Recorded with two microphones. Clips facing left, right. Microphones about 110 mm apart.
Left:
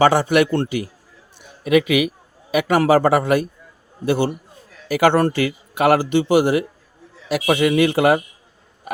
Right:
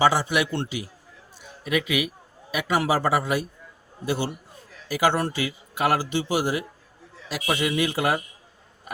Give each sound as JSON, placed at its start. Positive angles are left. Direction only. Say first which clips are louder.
{"t": 0.0, "sound": "a man's voice", "louder": "left 6 dB", "side_deg": 55}
{"t": 2.5, "sound": "a man's voice", "louder": "left 8 dB", "side_deg": 60}